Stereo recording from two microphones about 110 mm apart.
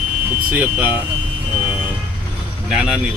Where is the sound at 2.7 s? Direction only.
5° right (ahead or behind).